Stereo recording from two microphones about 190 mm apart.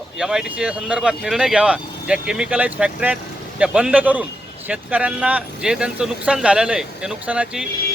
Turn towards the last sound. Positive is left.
turn(degrees=-5)  # may be behind; listen again after turning